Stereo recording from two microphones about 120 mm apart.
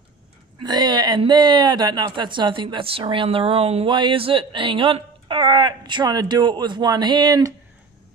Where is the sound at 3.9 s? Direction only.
45° right (ahead or behind).